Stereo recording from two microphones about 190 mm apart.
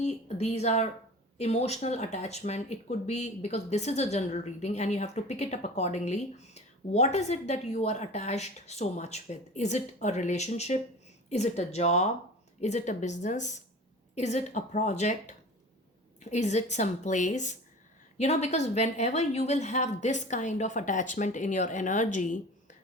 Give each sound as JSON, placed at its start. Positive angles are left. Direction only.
{"t": 0.0, "sound": "a woman's voice", "side_deg": 35}